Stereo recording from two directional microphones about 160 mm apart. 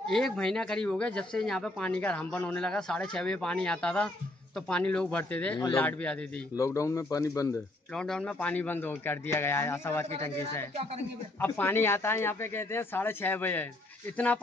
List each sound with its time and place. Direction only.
0.0 s speech: 5° left (ahead or behind)
6.5 s speech: 20° left (ahead or behind)
7.9 s speech: 5° left (ahead or behind)
10.7 s speech: 40° right (ahead or behind)
11.3 s speech: 15° left (ahead or behind)